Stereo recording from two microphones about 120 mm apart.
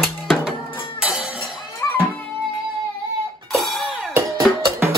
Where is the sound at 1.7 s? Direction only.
25° left (ahead or behind).